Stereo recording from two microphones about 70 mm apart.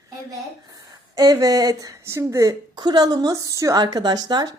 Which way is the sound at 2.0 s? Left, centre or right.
Right.